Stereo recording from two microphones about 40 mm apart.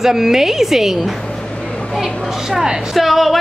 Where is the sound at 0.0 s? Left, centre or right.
Centre.